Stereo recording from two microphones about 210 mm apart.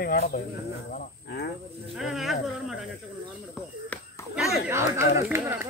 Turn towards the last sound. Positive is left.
turn(degrees=-10)  # may be behind; listen again after turning